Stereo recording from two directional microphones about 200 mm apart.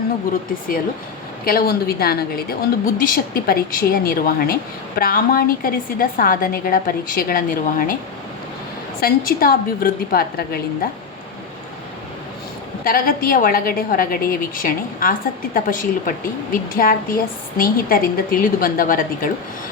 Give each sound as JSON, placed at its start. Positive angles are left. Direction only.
{"t": 1.5, "sound": "a woman's voice", "side_deg": 50}
{"t": 9.0, "sound": "a woman's voice", "side_deg": 45}
{"t": 12.8, "sound": "a woman's voice", "side_deg": 45}